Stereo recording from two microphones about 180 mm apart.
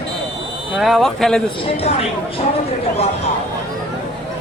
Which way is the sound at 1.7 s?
35° left (ahead or behind).